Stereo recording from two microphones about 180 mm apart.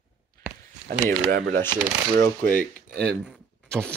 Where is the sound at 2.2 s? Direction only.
10° left (ahead or behind).